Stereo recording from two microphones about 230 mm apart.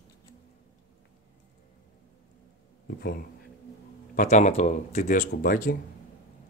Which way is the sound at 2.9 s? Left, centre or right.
Left.